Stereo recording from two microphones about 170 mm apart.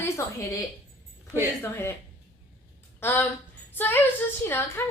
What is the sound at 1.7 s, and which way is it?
Speech, 10° left (ahead or behind).